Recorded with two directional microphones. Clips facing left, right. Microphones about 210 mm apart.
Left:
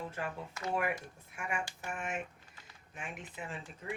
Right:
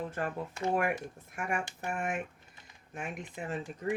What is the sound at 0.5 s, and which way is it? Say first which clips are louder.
Speech: right 6 dB; 30° right (ahead or behind).